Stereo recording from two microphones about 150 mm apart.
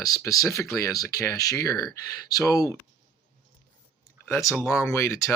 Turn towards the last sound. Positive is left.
turn(degrees=20)  # may be behind; listen again after turning